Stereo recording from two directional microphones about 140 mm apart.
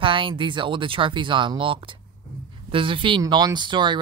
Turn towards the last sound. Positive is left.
turn(degrees=-35)  # may be behind; listen again after turning